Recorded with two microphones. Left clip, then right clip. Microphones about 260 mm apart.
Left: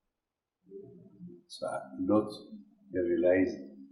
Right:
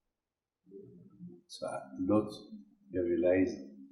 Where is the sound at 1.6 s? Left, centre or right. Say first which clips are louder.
Left 2 dB; centre.